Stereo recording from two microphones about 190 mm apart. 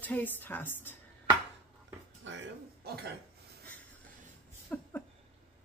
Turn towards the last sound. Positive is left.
turn(degrees=10)  # may be behind; listen again after turning